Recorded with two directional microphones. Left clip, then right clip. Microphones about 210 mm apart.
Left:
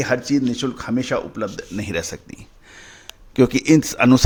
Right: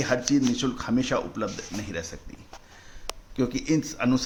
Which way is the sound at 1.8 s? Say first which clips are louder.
Left 9 dB; 45° left (ahead or behind).